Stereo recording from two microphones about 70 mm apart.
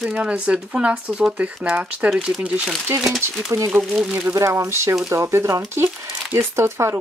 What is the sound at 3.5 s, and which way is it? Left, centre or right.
Speech, right.